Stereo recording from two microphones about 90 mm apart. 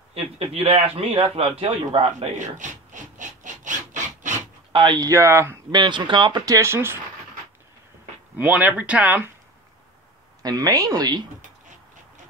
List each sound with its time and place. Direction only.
0.4 s a man's voice: 90° right
4.7 s speech: 50° right (ahead or behind)
5.1 s speech: 30° right (ahead or behind)
5.7 s speech: 60° right (ahead or behind)
6.4 s speech: 35° right (ahead or behind)
8.4 s speech: 15° right (ahead or behind)
10.4 s speech: 40° right (ahead or behind)